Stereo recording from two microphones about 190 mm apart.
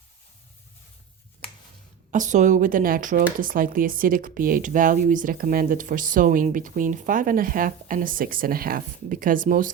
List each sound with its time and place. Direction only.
2.0 s speech: 40° right (ahead or behind)